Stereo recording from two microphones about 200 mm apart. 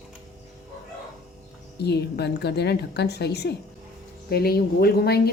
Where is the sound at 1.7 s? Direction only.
55° left (ahead or behind).